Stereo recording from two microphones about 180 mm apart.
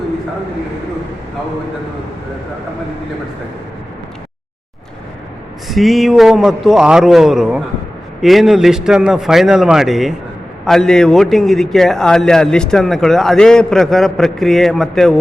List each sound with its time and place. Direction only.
5.6 s a man's voice: centre (ahead or behind)